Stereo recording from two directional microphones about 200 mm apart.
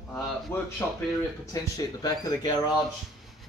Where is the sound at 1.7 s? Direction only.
20° left (ahead or behind).